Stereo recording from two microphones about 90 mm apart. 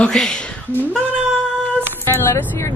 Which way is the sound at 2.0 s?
30° left (ahead or behind).